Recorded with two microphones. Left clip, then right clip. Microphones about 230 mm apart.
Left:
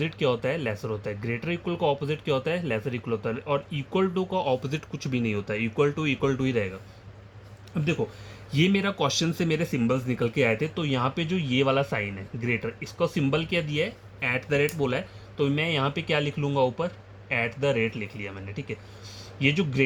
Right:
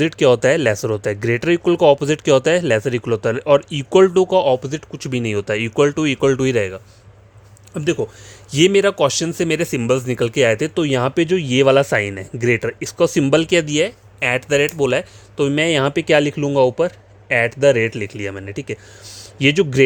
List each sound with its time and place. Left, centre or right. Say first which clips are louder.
0.0 s speech: right 12 dB; right
7.7 s speech: right 8 dB; right